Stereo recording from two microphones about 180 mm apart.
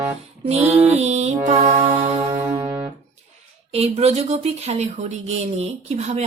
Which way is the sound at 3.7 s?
35° right (ahead or behind).